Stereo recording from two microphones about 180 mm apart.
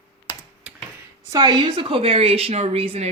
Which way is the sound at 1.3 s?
25° right (ahead or behind).